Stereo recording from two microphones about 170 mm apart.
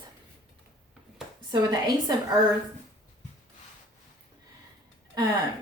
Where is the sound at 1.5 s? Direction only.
25° right (ahead or behind).